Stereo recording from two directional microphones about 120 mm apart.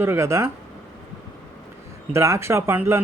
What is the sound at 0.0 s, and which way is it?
Speech, 20° right (ahead or behind).